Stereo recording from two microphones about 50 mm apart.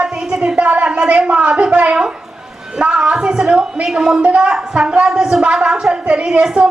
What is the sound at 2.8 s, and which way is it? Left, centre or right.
A woman's voice, centre.